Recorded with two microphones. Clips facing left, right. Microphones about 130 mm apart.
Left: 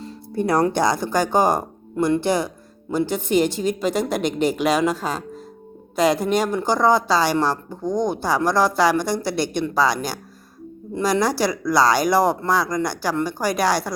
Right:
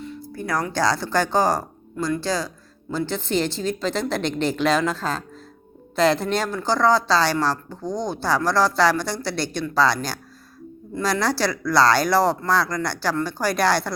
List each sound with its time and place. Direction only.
0.0 s a woman's voice: 30° left (ahead or behind); by 13.9 s 10° left (ahead or behind)